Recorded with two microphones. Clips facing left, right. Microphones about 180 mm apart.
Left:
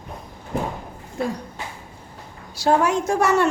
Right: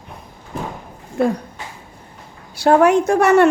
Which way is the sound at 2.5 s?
60° right (ahead or behind).